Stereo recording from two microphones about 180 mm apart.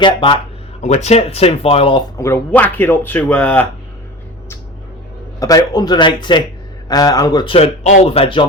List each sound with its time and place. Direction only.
0.0 s a man's voice: 25° left (ahead or behind)
0.8 s speech: 40° left (ahead or behind)
2.1 s speech: 15° left (ahead or behind)
5.4 s a man's voice: 20° left (ahead or behind)